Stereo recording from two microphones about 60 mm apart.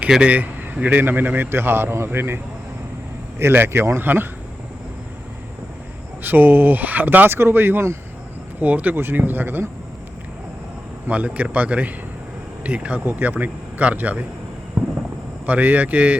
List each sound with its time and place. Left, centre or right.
0.2 s speech: right
6.2 s speech: right
8.6 s speech: right
11.1 s speech: right
15.4 s speech: right